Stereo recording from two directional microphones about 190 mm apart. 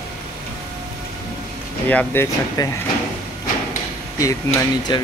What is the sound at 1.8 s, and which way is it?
Speech, 10° left (ahead or behind).